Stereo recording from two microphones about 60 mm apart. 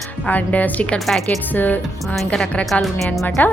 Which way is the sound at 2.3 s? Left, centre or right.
Centre.